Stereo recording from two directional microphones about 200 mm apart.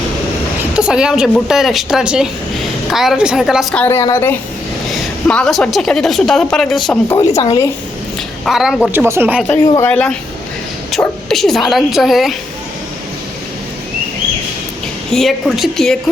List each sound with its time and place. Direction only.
0.6 s a woman's voice: 5° right (ahead or behind)
3.8 s a woman's voice: 15° left (ahead or behind)
8.4 s a woman's voice: centre (ahead or behind)
8.9 s speech: 10° right (ahead or behind)
9.6 s speech: 20° left (ahead or behind)
9.9 s a woman's voice: 5° left (ahead or behind)
15.1 s a woman's voice: centre (ahead or behind)